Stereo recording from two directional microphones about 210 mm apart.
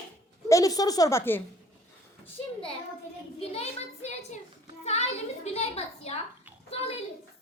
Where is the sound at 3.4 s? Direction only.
30° left (ahead or behind).